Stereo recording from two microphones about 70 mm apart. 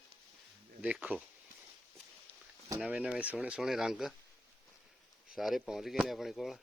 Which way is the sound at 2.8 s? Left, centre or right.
Centre.